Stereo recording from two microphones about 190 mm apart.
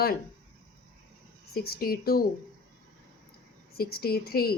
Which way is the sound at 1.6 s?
55° left (ahead or behind).